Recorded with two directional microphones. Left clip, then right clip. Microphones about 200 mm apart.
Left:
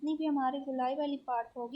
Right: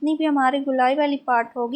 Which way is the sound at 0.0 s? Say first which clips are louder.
Right 12 dB; 20° right (ahead or behind).